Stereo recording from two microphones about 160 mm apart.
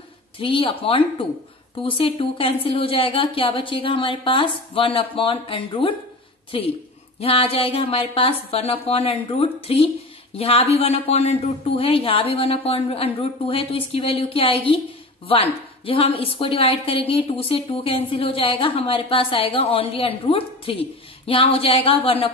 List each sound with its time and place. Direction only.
0.4 s a woman's voice: 35° left (ahead or behind)
7.2 s a woman's voice: 35° left (ahead or behind)